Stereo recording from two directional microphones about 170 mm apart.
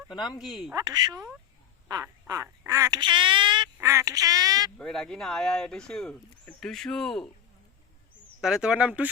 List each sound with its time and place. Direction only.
0.1 s speech: 25° left (ahead or behind)
0.7 s speech: 20° right (ahead or behind)
3.8 s speech: 15° right (ahead or behind)
4.8 s speech: 5° left (ahead or behind)
8.4 s speech: 5° right (ahead or behind)